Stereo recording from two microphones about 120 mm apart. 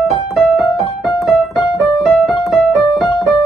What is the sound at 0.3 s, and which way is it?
Keyboard, centre (ahead or behind).